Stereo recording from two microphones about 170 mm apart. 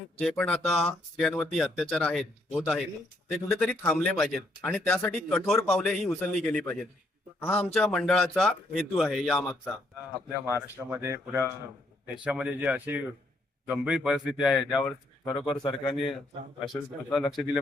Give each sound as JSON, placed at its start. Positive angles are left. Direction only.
{"t": 0.2, "sound": "speech", "side_deg": 5}
{"t": 10.8, "sound": "speech", "side_deg": -15}
{"t": 15.6, "sound": "speech", "side_deg": 25}
{"t": 16.6, "sound": "speech", "side_deg": 0}